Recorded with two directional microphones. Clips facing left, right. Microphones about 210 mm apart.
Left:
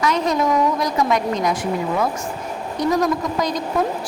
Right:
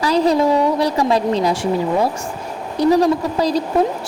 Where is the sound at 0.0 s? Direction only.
30° right (ahead or behind).